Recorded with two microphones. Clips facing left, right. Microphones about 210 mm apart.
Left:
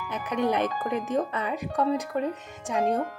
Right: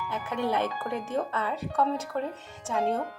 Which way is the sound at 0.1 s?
15° left (ahead or behind).